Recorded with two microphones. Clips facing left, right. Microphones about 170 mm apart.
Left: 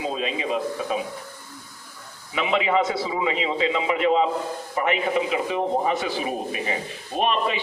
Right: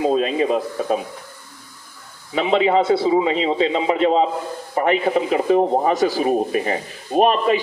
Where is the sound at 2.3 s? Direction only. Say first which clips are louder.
Right 5 dB; 35° right (ahead or behind).